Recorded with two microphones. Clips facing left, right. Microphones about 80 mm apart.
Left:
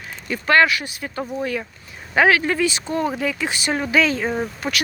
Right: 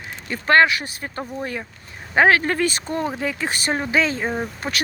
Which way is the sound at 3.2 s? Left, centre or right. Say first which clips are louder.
Left 1 dB; right.